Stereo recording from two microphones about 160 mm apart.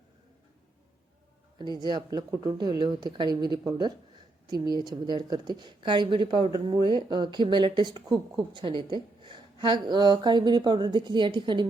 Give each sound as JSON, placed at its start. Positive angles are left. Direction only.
{"t": 1.5, "sound": "a woman's voice", "side_deg": -25}